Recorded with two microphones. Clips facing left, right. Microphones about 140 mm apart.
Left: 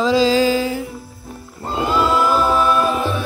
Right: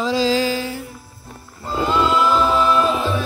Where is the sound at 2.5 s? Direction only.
20° right (ahead or behind).